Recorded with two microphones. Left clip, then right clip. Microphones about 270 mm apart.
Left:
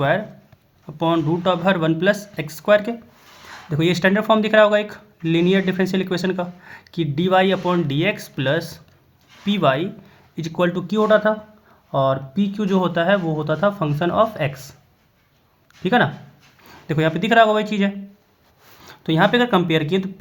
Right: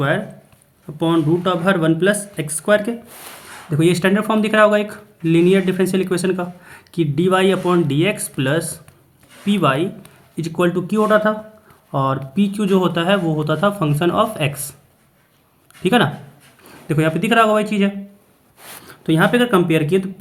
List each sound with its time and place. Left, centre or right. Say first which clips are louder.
0.9 s speech: right 2 dB; centre
15.8 s speech: right 2 dB; centre